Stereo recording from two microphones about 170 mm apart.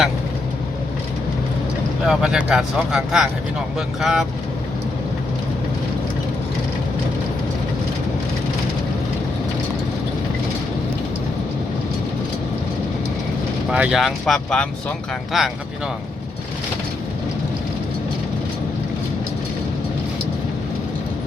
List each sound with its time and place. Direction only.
2.0 s speech: 5° right (ahead or behind)
13.7 s speech: 5° right (ahead or behind)